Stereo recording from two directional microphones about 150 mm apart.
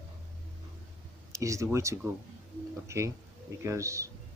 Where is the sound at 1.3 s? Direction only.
20° right (ahead or behind).